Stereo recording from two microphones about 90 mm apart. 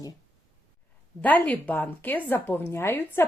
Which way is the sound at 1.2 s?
20° left (ahead or behind).